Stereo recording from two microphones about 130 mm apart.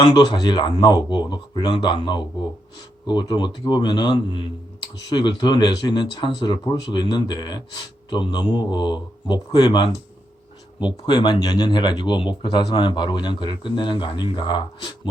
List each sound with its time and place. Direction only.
0.0 s speech: 35° left (ahead or behind)